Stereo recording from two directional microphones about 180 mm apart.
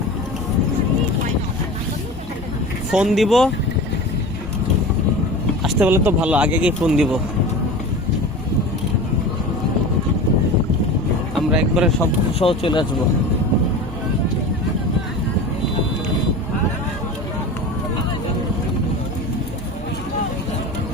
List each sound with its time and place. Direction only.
2.9 s speech: centre (ahead or behind)
5.6 s speech: 10° right (ahead or behind)
11.3 s speech: centre (ahead or behind)
12.4 s speech: 30° left (ahead or behind)